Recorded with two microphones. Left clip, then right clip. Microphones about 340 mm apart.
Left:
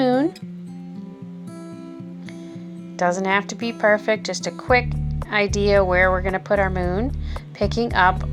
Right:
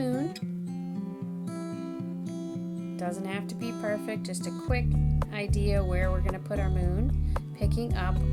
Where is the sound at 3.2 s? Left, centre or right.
Right.